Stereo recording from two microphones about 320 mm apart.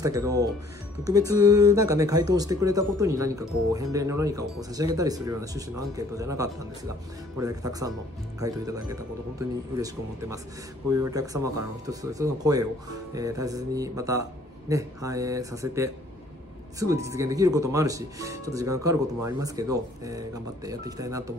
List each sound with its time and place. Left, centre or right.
0.0 s speech: centre
10.9 s speech: centre